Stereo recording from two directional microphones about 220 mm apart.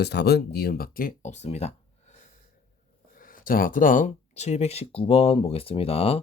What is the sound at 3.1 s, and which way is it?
Speech, 40° left (ahead or behind).